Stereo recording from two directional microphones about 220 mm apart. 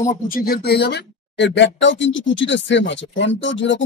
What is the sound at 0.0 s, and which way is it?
Speech, 35° left (ahead or behind).